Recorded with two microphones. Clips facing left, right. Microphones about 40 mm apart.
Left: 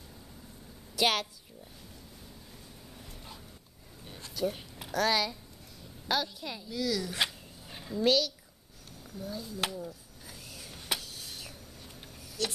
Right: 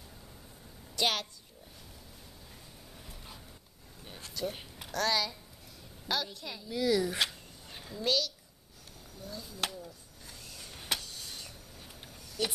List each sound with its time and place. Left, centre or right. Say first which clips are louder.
0.9 s a woman's voice: left 3 dB; centre
4.0 s a sound: left 1 dB; centre
4.7 s a woman's voice: left 2 dB; centre
6.7 s speech: right 4 dB; centre
7.2 s a sound: left 1 dB; centre
12.4 s speech: even; right